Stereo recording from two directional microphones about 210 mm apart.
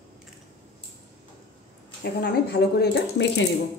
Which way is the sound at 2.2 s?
50° left (ahead or behind).